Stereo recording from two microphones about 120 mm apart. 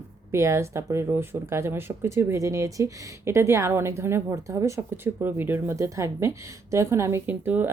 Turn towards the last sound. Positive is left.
turn(degrees=-15)  # may be behind; listen again after turning